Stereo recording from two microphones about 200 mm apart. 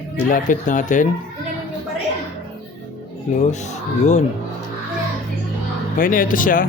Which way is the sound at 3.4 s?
35° left (ahead or behind).